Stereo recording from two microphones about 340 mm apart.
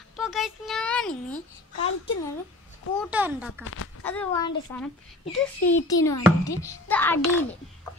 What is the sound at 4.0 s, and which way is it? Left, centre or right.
A child's voice, centre.